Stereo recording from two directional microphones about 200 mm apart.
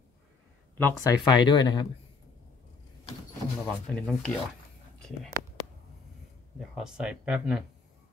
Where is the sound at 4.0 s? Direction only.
5° left (ahead or behind).